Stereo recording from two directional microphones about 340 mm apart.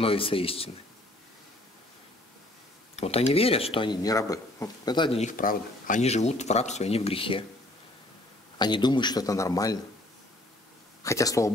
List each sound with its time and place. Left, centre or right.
0.0 s speech: centre
3.0 s speech: centre
8.5 s speech: centre
11.0 s speech: centre